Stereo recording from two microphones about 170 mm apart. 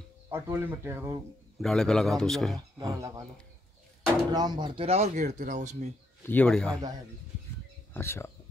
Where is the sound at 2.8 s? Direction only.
20° right (ahead or behind).